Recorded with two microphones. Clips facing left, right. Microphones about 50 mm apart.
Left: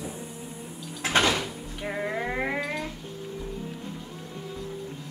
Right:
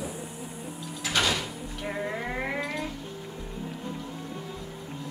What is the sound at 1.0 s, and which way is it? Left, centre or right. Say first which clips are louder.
Door: left 4 dB; left.